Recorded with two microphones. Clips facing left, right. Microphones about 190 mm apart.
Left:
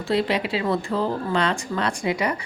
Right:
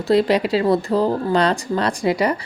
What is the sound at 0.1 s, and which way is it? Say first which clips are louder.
A woman's voice: right 7 dB; 40° right (ahead or behind).